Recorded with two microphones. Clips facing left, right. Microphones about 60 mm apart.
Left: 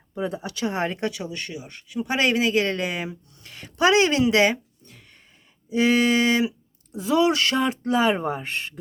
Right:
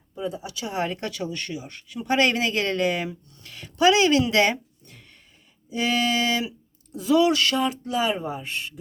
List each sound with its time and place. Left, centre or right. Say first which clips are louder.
0.1 s speech: left 2 dB; left
0.9 s a man's voice: left 2 dB; centre
3.5 s a woman's voice: even; left
4.2 s a sound: left 2 dB; left
5.7 s a sound: left 4 dB; left
6.9 s speech: right 1 dB; left
8.2 s speech: left 3 dB; left